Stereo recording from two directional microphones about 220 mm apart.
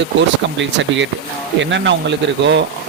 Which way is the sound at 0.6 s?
55° right (ahead or behind).